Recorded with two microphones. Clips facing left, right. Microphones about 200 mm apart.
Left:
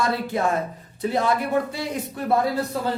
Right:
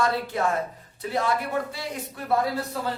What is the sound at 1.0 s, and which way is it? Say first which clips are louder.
Speech: left 4 dB; 20° left (ahead or behind).